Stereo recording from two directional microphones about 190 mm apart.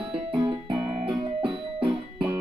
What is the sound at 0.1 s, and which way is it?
Music, 25° right (ahead or behind).